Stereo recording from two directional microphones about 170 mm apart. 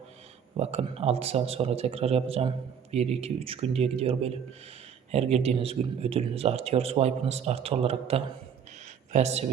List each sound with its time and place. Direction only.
0.5 s speech: 35° right (ahead or behind)